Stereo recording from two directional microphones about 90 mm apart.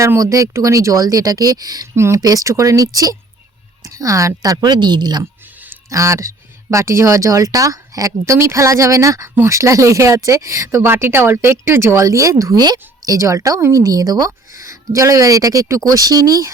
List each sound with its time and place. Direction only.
0.0 s speech: 35° right (ahead or behind)
2.0 s speech: 30° right (ahead or behind); by 5.2 s 55° right (ahead or behind)
5.2 s speech: 30° right (ahead or behind)
12.5 s speech: 45° right (ahead or behind)